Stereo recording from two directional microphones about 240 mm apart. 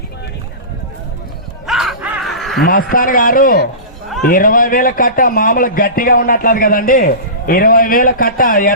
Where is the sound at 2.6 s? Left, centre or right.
Left.